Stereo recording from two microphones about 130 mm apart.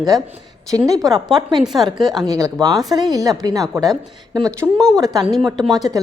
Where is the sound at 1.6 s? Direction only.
Centre (ahead or behind).